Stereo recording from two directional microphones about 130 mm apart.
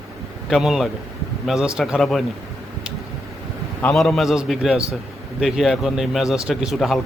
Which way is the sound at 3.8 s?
5° left (ahead or behind).